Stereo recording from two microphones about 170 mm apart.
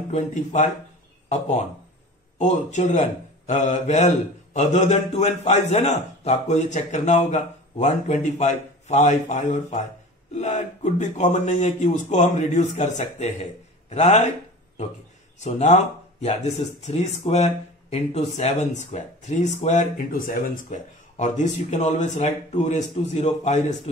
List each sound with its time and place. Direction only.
0.1 s a man's voice: 45° left (ahead or behind)
2.3 s a man's voice: 40° left (ahead or behind)
15.4 s a man's voice: 40° left (ahead or behind)